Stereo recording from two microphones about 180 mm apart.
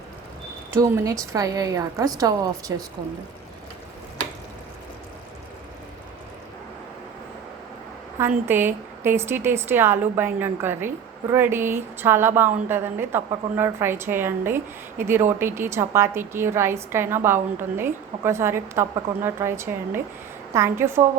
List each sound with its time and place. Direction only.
0.7 s a woman's voice: 15° right (ahead or behind)
8.4 s a woman's voice: 10° right (ahead or behind)